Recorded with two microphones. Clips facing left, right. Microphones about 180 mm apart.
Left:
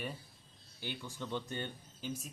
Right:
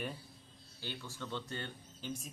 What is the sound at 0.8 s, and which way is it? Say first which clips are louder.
Speech: left 2 dB; 15° left (ahead or behind).